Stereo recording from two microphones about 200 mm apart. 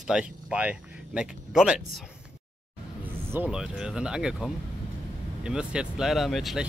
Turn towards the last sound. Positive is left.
turn(degrees=0)  # may be behind; listen again after turning